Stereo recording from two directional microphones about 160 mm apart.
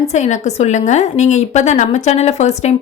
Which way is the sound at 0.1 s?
45° left (ahead or behind).